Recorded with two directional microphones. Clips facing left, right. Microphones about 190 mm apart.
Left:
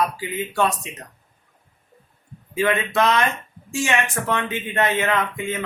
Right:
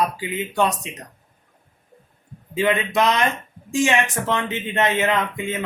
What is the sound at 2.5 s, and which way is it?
A man's voice, 15° right (ahead or behind).